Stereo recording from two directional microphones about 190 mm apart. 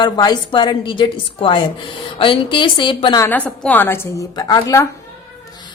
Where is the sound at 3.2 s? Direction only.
10° left (ahead or behind).